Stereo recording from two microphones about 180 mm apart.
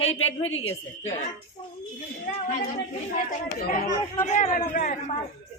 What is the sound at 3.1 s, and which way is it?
Speech, 55° left (ahead or behind).